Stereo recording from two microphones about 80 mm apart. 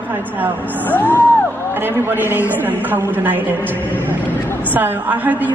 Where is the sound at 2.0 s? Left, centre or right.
Right.